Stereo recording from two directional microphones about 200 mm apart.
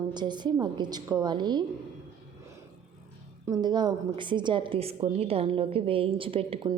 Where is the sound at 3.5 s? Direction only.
20° right (ahead or behind).